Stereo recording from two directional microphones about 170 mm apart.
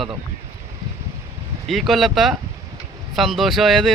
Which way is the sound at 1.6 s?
Centre (ahead or behind).